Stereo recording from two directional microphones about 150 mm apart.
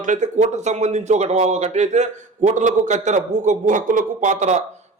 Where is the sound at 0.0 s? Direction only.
55° right (ahead or behind).